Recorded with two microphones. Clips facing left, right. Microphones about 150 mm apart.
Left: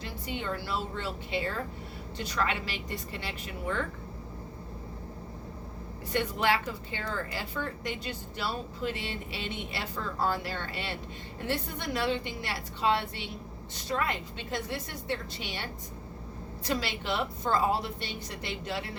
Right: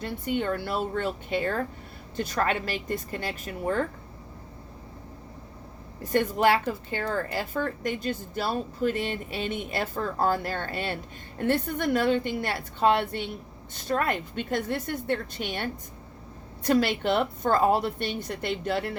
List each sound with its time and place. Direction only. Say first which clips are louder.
0.0 s a woman's voice: right 8 dB; 55° right (ahead or behind)
6.0 s a woman's voice: right 7 dB; 45° right (ahead or behind)